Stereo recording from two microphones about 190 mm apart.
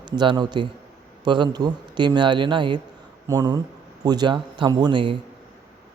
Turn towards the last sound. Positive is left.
turn(degrees=-25)  # may be behind; listen again after turning